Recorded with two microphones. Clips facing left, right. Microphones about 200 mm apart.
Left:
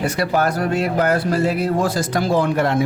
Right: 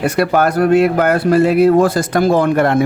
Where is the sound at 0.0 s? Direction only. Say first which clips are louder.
Right 5 dB; 60° right (ahead or behind).